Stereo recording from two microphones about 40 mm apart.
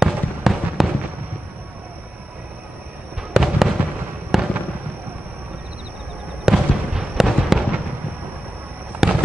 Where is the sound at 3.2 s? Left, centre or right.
Centre.